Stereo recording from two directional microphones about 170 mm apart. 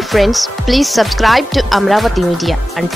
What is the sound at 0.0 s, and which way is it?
Speech, centre (ahead or behind).